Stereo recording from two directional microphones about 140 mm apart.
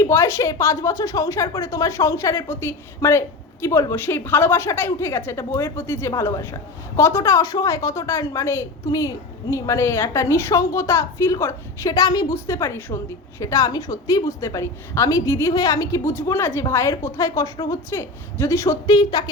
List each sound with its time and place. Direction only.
0.0 s a woman's voice: 20° left (ahead or behind)